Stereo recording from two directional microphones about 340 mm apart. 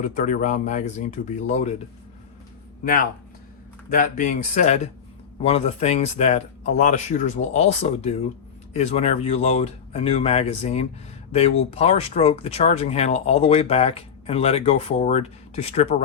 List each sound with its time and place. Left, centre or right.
0.0 s speech: left
2.8 s speech: left